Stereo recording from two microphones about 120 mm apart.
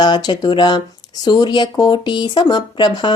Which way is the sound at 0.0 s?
35° left (ahead or behind).